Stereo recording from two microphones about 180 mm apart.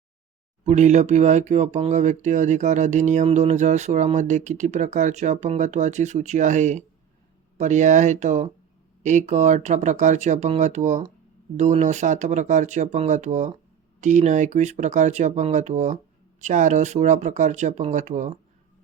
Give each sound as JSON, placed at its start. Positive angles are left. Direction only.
{"t": 0.6, "sound": "speech", "side_deg": -40}